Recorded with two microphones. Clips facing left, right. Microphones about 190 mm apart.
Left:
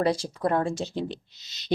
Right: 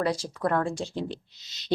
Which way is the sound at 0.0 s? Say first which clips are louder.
Left 2 dB; 30° left (ahead or behind).